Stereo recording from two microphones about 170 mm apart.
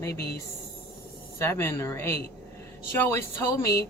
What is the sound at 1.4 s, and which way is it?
Speech, 15° left (ahead or behind).